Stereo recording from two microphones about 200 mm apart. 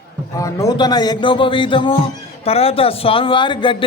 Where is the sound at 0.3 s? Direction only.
20° left (ahead or behind).